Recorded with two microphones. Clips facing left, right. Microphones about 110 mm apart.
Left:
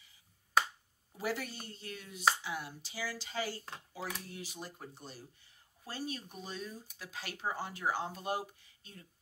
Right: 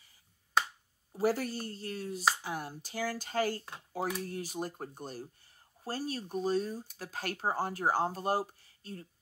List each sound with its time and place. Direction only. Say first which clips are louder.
1.1 s speech: right 8 dB; 40° right (ahead or behind)